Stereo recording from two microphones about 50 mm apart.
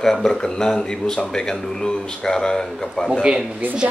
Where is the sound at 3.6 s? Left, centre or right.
Right.